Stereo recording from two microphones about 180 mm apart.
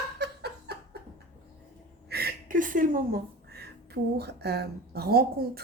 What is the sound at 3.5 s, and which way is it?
A woman's voice, 65° right (ahead or behind).